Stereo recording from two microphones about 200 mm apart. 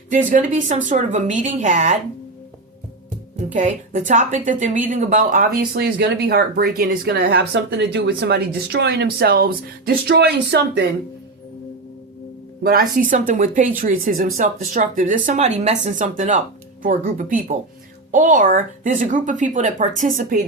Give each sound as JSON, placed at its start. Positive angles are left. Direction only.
{"t": 0.3, "sound": "a woman's voice", "side_deg": -40}
{"t": 3.3, "sound": "a woman's voice", "side_deg": -40}
{"t": 12.6, "sound": "a woman's voice", "side_deg": -45}